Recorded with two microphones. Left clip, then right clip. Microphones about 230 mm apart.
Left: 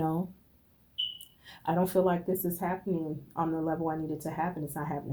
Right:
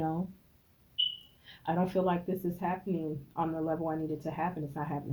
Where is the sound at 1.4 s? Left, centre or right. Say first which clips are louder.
Left 3 dB; left.